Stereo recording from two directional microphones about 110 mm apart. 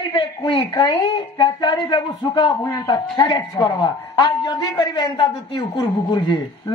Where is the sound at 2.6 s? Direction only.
35° left (ahead or behind).